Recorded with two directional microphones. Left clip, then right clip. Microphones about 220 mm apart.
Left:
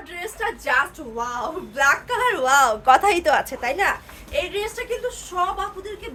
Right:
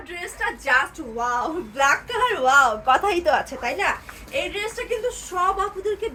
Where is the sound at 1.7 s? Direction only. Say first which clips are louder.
Left 2 dB; 20° left (ahead or behind).